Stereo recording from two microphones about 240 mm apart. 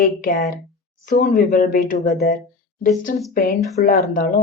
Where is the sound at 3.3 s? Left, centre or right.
Left.